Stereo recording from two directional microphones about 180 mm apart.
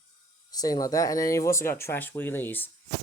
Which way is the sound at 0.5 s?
20° left (ahead or behind).